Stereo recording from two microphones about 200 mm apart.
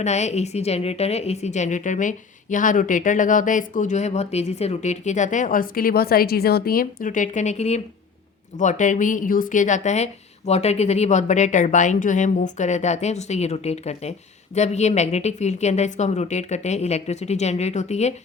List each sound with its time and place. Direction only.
0.0 s a woman's voice: 35° left (ahead or behind)